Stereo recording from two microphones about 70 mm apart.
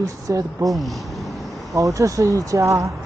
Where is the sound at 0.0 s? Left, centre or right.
Right.